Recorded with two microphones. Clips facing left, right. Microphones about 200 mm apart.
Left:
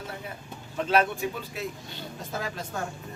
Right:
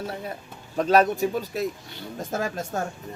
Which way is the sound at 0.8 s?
40° right (ahead or behind).